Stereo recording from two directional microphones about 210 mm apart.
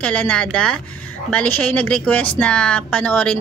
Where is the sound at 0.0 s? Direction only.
5° left (ahead or behind).